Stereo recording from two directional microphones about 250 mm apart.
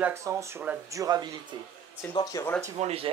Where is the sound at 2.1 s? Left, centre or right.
Centre.